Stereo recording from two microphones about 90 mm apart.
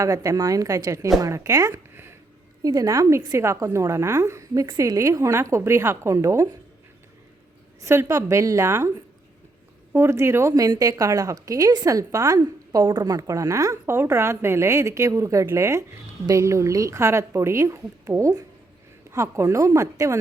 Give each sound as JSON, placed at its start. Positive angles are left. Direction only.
{"t": 0.0, "sound": "a woman's voice", "side_deg": -35}
{"t": 1.7, "sound": "a sound", "side_deg": -25}
{"t": 2.6, "sound": "a woman's voice", "side_deg": -40}
{"t": 7.8, "sound": "a woman's voice", "side_deg": -30}
{"t": 9.9, "sound": "a woman's voice", "side_deg": -30}
{"t": 10.5, "sound": "a woman's voice", "side_deg": -45}
{"t": 12.4, "sound": "a woman's voice", "side_deg": -50}